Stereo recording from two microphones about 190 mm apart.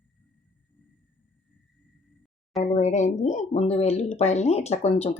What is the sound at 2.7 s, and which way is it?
Speech, 40° left (ahead or behind).